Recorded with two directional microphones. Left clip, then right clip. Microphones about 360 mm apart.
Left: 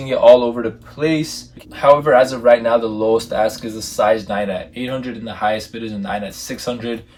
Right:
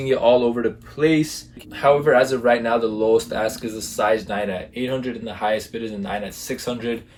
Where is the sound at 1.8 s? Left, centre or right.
Centre.